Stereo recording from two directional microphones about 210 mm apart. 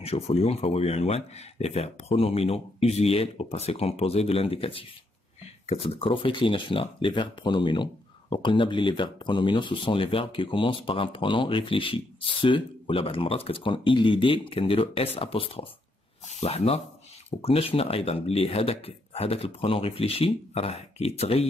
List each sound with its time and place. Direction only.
0.0 s speech: 30° left (ahead or behind)